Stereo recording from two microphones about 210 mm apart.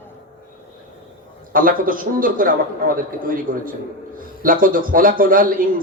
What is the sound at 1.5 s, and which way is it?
A man's voice, 40° right (ahead or behind).